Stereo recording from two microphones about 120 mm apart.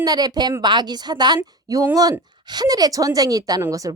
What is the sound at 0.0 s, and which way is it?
A woman's voice, 35° right (ahead or behind).